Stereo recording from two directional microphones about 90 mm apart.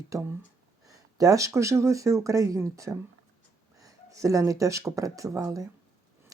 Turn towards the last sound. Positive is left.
turn(degrees=-40)  # may be behind; listen again after turning